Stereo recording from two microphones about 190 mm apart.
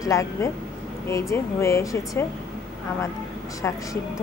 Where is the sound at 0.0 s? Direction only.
15° left (ahead or behind).